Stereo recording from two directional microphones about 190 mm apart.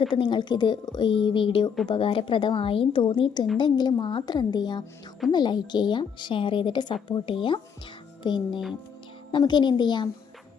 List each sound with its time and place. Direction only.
0.1 s a woman's voice: 25° left (ahead or behind)